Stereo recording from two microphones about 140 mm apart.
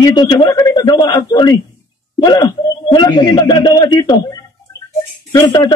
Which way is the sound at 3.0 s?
30° left (ahead or behind).